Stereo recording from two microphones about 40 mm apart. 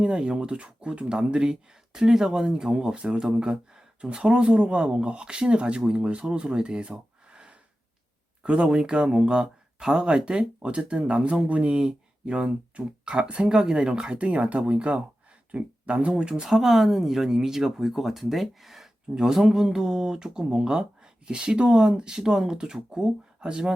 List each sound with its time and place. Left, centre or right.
0.0 s speech: right
11.7 s speech: centre
13.5 s speech: centre
16.3 s speech: centre